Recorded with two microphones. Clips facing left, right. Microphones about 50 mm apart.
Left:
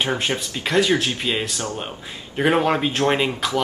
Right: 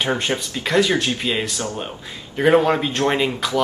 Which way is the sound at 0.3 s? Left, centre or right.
Centre.